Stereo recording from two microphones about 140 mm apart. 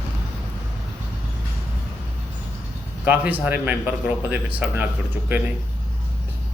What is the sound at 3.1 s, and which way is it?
Speech, 10° right (ahead or behind).